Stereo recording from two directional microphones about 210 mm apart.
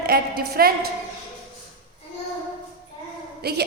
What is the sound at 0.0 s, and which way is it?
Speech, 50° right (ahead or behind).